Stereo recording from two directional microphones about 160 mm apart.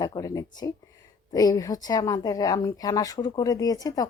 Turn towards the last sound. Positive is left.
turn(degrees=25)  # may be behind; listen again after turning